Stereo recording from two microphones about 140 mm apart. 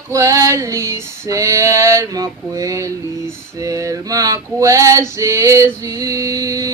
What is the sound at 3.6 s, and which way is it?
Male singing, 25° right (ahead or behind).